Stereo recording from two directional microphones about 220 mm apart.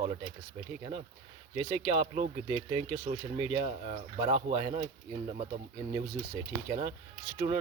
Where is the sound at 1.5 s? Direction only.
20° right (ahead or behind).